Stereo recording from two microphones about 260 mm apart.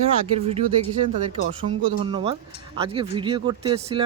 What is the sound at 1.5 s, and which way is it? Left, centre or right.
Speech, centre.